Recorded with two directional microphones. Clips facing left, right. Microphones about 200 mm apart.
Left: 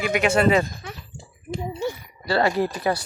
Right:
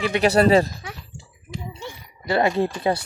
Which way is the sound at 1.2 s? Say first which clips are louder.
Left 6 dB; 55° left (ahead or behind).